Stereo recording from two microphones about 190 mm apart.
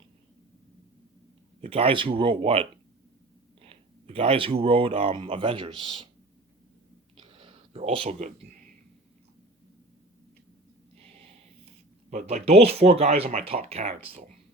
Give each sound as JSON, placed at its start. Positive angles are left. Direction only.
{"t": 1.6, "sound": "speech", "side_deg": -30}
{"t": 7.2, "sound": "a sound", "side_deg": -30}
{"t": 12.1, "sound": "speech", "side_deg": -35}